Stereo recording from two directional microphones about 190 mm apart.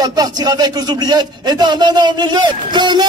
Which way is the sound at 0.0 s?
20° right (ahead or behind).